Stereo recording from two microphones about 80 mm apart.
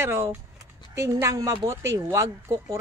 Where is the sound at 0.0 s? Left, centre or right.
Right.